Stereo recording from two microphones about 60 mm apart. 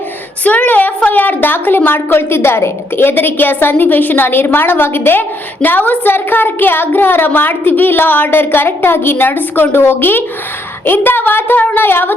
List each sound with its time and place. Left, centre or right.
0.4 s a woman's voice: left